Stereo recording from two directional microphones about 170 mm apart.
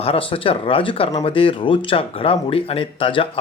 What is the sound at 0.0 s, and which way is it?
Speech, 35° left (ahead or behind).